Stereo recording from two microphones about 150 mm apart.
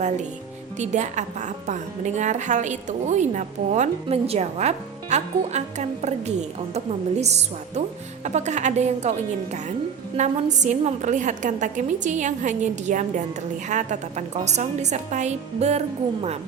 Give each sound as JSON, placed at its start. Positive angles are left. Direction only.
{"t": 0.8, "sound": "a woman's voice", "side_deg": -50}